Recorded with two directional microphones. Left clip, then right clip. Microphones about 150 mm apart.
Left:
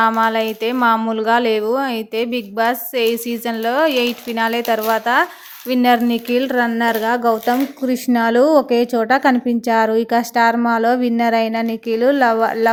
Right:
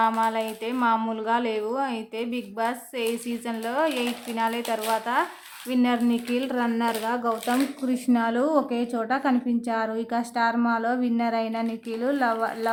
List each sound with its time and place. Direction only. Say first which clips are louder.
0.2 s a woman's voice: left 9 dB; 40° left (ahead or behind)